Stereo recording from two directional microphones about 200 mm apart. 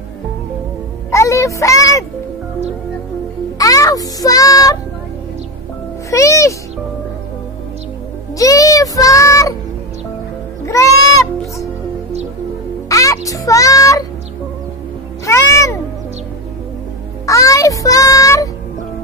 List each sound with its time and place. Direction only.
1.1 s a sound: 15° left (ahead or behind)
3.5 s music: 15° left (ahead or behind)
6.0 s a child's voice: 15° left (ahead or behind)
8.4 s child singing: 15° left (ahead or behind)
10.7 s music: 15° left (ahead or behind)
12.8 s music: 15° left (ahead or behind)
15.2 s music: 15° left (ahead or behind)
17.3 s child singing: 15° left (ahead or behind)